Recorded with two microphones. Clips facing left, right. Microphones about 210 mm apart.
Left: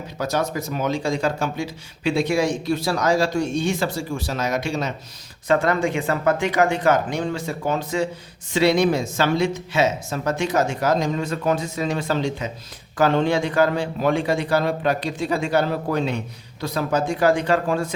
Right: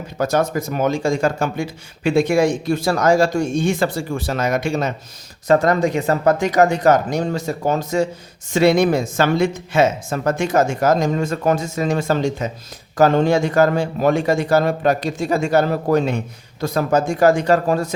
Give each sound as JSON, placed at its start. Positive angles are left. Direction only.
{"t": 0.2, "sound": "a man's voice", "side_deg": -50}
{"t": 5.5, "sound": "a man's voice", "side_deg": -40}